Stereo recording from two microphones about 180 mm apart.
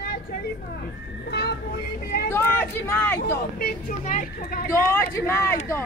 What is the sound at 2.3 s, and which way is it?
Speech, 10° left (ahead or behind).